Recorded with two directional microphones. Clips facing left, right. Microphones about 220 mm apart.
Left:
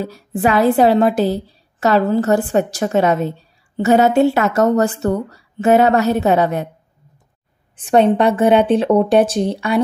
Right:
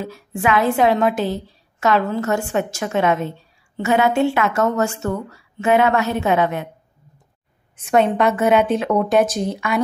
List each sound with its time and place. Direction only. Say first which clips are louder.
0.0 s a woman's voice: left 4 dB; 35° left (ahead or behind)
7.7 s a woman's voice: left 4 dB; 30° left (ahead or behind)